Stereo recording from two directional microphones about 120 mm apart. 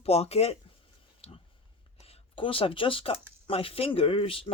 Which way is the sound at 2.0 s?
50° left (ahead or behind).